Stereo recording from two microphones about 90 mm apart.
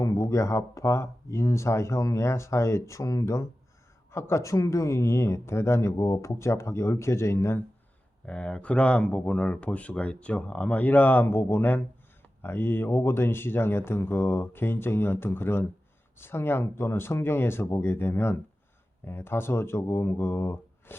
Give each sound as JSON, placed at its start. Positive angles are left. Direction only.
{"t": 0.0, "sound": "speech", "side_deg": 40}
{"t": 8.3, "sound": "speech", "side_deg": 15}